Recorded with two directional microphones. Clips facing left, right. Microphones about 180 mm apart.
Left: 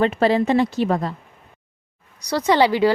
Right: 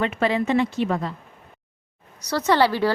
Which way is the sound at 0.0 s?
35° left (ahead or behind).